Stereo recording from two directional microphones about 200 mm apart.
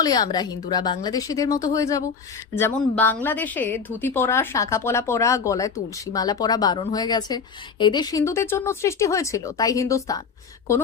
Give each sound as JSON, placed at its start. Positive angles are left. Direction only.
{"t": 0.0, "sound": "a woman's voice", "side_deg": 20}